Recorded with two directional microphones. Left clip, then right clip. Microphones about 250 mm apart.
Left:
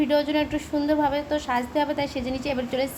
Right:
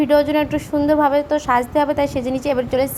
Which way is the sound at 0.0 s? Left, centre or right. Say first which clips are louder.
Right 7 dB; centre.